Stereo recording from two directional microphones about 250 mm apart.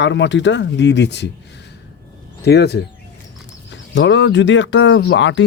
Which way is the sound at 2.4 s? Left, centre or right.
Left.